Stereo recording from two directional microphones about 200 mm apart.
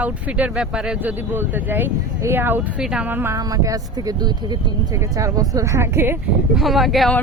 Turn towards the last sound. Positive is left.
turn(degrees=0)  # may be behind; listen again after turning